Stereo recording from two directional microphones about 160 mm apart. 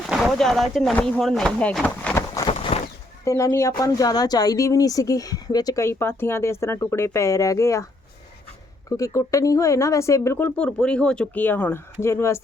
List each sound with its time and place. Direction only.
0.1 s speech: centre (ahead or behind)
2.7 s a sound: 40° left (ahead or behind)
3.2 s speech: 20° left (ahead or behind)
8.9 s speech: 20° left (ahead or behind)